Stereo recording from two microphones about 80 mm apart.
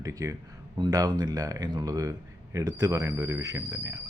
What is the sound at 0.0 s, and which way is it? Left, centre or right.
Speech, right.